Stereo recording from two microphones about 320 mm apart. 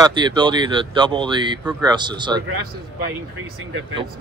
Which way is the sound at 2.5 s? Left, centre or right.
Right.